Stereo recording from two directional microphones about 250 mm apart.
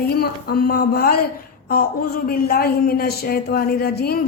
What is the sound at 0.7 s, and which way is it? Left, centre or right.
Speech, left.